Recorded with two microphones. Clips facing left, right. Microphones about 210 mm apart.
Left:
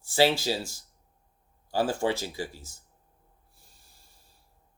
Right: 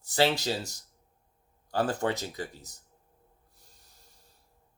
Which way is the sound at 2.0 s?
15° left (ahead or behind).